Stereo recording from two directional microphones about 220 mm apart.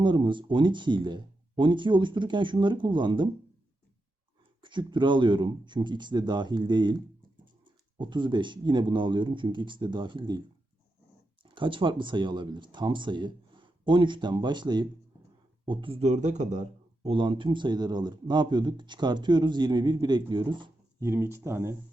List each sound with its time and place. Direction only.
0.0 s speech: 20° right (ahead or behind)
4.6 s speech: 20° right (ahead or behind)
11.4 s speech: 20° right (ahead or behind)